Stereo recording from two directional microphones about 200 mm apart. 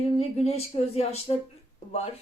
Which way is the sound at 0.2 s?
30° left (ahead or behind).